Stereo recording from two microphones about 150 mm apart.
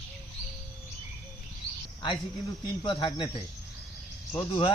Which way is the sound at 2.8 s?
35° left (ahead or behind).